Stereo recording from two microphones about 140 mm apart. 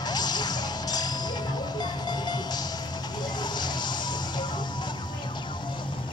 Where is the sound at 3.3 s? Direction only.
30° left (ahead or behind).